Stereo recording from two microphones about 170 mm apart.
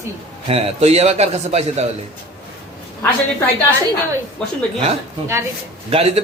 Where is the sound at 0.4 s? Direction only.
35° right (ahead or behind).